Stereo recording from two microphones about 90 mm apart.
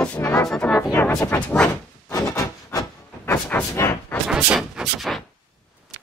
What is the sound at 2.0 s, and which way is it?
Rub, 35° left (ahead or behind).